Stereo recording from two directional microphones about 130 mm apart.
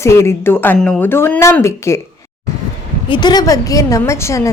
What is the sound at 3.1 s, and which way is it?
Speech, 35° left (ahead or behind).